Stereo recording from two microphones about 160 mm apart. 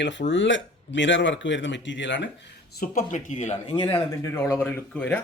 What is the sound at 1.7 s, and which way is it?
Speech, 90° left.